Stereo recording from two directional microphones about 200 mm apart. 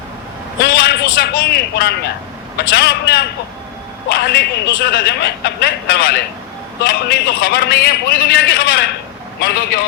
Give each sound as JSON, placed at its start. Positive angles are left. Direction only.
{"t": 0.6, "sound": "a man's voice", "side_deg": 55}